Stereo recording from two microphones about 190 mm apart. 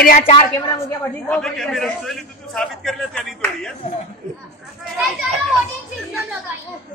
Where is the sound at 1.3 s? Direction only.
5° left (ahead or behind).